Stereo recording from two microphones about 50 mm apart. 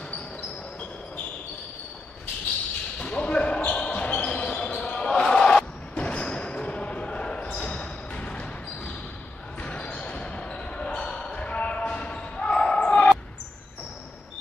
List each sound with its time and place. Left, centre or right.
3.0 s basketball bounce: left
5.9 s basketball bounce: left